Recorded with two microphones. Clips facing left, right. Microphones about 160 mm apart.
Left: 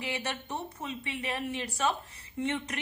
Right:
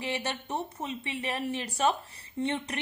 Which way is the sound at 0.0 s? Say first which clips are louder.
Right 2 dB; 30° right (ahead or behind).